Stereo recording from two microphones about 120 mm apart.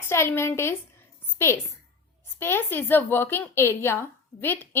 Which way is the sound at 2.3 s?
20° left (ahead or behind).